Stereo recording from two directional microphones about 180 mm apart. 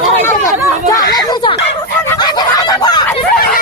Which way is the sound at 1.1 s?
20° left (ahead or behind).